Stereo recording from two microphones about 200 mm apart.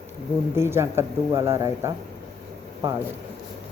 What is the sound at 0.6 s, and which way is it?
Speech, 10° right (ahead or behind).